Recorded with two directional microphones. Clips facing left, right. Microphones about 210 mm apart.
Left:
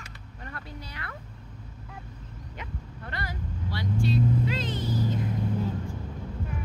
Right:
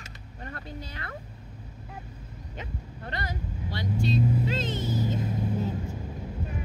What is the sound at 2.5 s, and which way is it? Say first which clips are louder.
Vehicle: right 2 dB; 30° right (ahead or behind).